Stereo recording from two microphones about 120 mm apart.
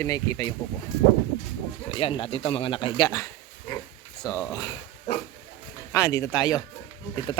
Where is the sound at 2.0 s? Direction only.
50° left (ahead or behind).